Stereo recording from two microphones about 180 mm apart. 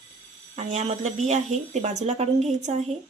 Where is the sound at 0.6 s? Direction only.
40° right (ahead or behind).